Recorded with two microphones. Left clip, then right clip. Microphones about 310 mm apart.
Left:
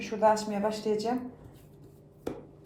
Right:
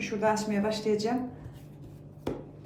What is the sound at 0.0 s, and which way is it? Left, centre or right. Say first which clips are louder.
A woman's voice: left 3 dB; centre.